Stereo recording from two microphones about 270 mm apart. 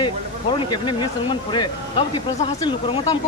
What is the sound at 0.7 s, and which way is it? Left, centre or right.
Speech, centre.